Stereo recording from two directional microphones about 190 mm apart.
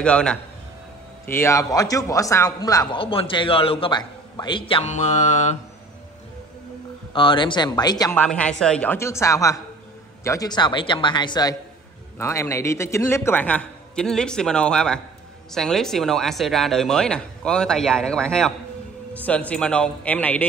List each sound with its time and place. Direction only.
0.0 s a man's voice: 5° left (ahead or behind); by 5.6 s 35° left (ahead or behind)
7.2 s a man's voice: 25° left (ahead or behind)
8.2 s a man's voice: 5° left (ahead or behind)